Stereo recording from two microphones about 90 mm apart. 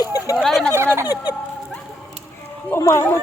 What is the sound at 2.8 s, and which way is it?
Speech, 35° left (ahead or behind).